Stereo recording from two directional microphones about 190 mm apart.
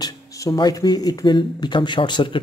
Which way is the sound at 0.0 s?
15° left (ahead or behind).